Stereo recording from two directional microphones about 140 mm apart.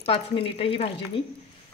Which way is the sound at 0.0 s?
40° left (ahead or behind).